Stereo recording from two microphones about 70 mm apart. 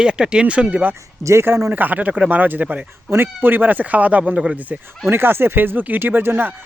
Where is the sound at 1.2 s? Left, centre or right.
Right; by 2.9 s centre.